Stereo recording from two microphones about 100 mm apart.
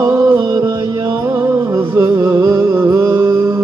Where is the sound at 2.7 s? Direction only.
25° right (ahead or behind).